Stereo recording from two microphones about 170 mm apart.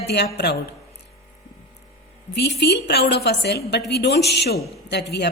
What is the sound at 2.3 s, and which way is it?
A woman's voice, 80° left.